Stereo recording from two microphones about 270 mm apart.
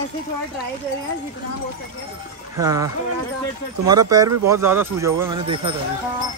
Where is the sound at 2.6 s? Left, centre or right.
Centre.